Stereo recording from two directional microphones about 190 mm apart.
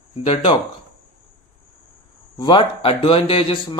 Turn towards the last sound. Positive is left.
turn(degrees=30)  # may be behind; listen again after turning